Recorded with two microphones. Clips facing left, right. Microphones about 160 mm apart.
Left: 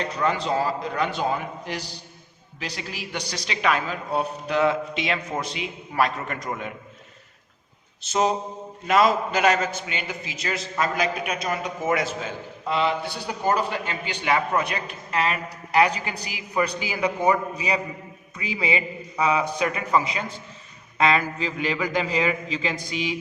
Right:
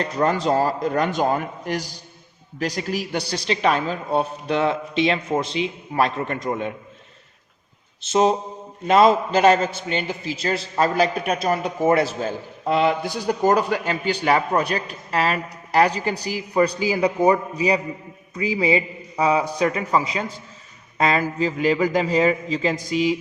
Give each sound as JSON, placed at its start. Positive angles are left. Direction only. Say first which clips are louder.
{"t": 0.0, "sound": "a man's voice", "louder": "right 4 dB", "side_deg": -40}
{"t": 8.0, "sound": "a man's voice", "louder": "right 4 dB", "side_deg": -25}
{"t": 12.6, "sound": "a man's voice", "louder": "right 4 dB", "side_deg": -45}